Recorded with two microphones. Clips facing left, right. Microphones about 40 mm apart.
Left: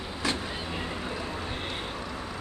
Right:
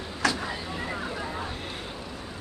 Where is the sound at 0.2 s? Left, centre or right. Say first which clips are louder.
Right 4 dB; right.